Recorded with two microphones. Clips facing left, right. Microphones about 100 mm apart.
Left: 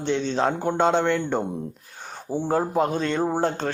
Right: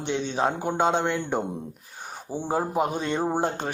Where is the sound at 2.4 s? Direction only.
15° right (ahead or behind).